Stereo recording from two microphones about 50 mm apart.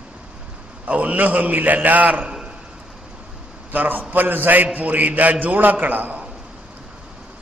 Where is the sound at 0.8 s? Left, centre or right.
Right.